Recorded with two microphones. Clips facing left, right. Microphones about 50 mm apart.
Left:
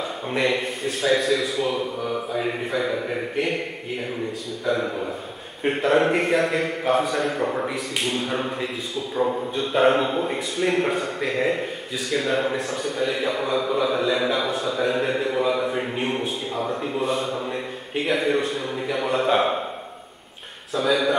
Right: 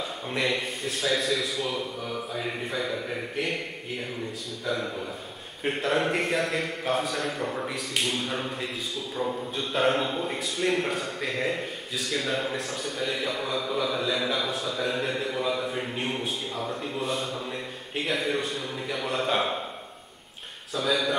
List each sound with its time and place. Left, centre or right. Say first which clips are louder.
0.3 s a man's voice: left 5 dB; centre
3.3 s a man's voice: left 5 dB; centre
20.7 s a man's voice: left 5 dB; centre